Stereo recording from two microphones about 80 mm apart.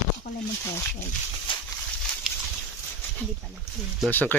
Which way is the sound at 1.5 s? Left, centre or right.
Left.